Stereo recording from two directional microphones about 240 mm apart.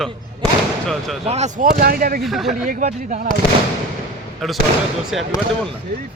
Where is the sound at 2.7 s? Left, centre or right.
Right.